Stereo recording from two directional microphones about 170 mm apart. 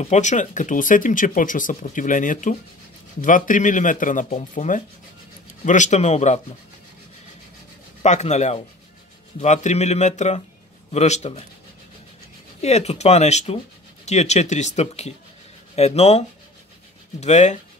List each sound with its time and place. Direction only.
0.0 s speech: 45° left (ahead or behind)
8.0 s speech: 40° left (ahead or behind)
12.6 s speech: 40° left (ahead or behind)